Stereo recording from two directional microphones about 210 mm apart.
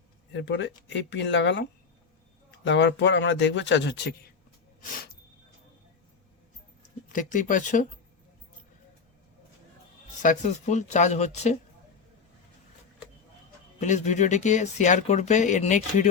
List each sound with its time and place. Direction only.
0.3 s speech: 60° left (ahead or behind)
2.6 s speech: 60° left (ahead or behind)
7.1 s speech: 40° left (ahead or behind)
10.2 s speech: 35° left (ahead or behind)
13.7 s speech: 35° left (ahead or behind)